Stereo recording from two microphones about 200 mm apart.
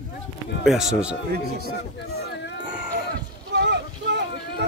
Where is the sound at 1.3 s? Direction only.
50° right (ahead or behind).